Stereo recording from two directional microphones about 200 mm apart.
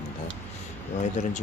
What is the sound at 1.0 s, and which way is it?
Speech, 40° left (ahead or behind).